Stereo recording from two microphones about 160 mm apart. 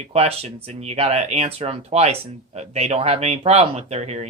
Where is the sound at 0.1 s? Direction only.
40° right (ahead or behind).